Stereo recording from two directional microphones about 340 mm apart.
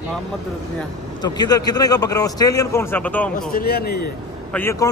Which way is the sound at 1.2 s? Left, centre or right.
Centre.